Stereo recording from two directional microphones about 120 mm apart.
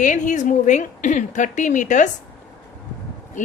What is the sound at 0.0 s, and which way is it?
A woman's voice, 90° left.